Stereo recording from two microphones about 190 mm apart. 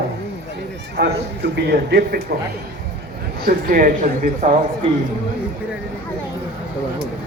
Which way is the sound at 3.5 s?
45° right (ahead or behind).